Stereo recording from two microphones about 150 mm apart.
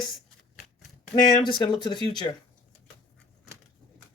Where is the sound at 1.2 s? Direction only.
30° left (ahead or behind).